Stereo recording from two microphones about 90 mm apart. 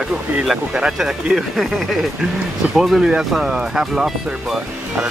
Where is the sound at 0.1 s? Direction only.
10° right (ahead or behind).